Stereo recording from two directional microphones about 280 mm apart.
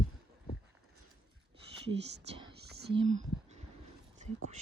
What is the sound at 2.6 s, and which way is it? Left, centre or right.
Whispering, right.